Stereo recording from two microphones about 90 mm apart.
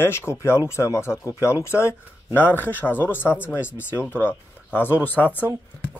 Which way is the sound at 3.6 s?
15° right (ahead or behind).